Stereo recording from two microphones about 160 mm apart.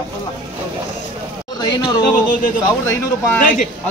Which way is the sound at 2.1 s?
60° left (ahead or behind).